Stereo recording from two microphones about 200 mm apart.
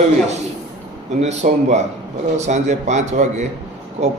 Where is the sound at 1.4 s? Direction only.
35° right (ahead or behind).